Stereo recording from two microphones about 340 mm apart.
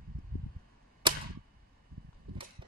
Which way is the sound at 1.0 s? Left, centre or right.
Centre.